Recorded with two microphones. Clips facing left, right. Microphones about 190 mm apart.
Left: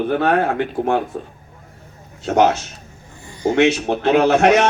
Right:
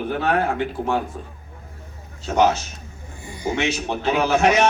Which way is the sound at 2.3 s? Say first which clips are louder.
Left 3 dB; 60° left (ahead or behind).